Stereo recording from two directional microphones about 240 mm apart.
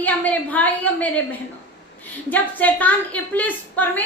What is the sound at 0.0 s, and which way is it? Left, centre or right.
A woman's voice, centre.